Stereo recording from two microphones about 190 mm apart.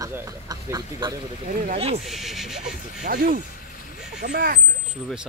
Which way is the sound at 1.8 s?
30° right (ahead or behind).